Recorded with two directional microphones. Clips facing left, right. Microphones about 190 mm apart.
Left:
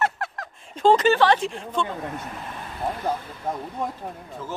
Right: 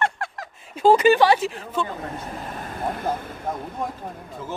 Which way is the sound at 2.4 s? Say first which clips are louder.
Right 1 dB; 45° right (ahead or behind).